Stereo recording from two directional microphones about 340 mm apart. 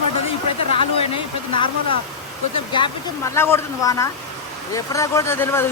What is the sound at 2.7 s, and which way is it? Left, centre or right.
Speech, centre.